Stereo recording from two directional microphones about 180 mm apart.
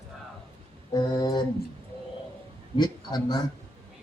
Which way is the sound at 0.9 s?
20° left (ahead or behind).